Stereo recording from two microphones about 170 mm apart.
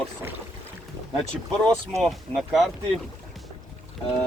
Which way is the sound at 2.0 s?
Centre (ahead or behind).